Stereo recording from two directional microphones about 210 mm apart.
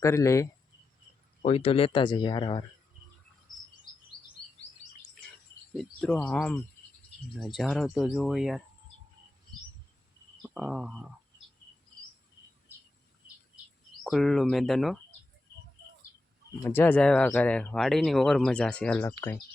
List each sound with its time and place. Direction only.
0.0 s speech: 15° left (ahead or behind)
1.4 s speech: 30° left (ahead or behind)
5.7 s speech: centre (ahead or behind)
10.4 s a sound: 5° right (ahead or behind)
14.0 s speech: centre (ahead or behind)
16.6 s speech: 10° left (ahead or behind)